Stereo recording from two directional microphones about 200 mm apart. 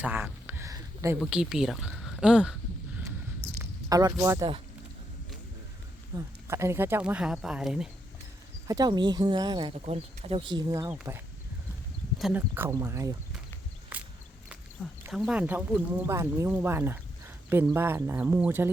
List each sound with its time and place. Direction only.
0.0 s a sound: 10° right (ahead or behind)
1.2 s speech: 5° right (ahead or behind)
3.6 s speech: 15° right (ahead or behind)
6.1 s speech: 15° right (ahead or behind)
8.6 s speech: 20° right (ahead or behind)
12.2 s speech: 10° right (ahead or behind)
13.9 s a sound: 10° right (ahead or behind)
15.0 s speech: 5° right (ahead or behind)